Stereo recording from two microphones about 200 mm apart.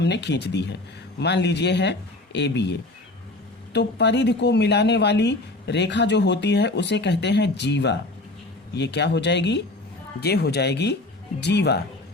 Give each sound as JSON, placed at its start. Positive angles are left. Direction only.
{"t": 0.0, "sound": "speech", "side_deg": 60}